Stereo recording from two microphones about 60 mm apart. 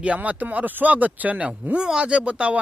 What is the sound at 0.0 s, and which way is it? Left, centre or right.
Speech, right.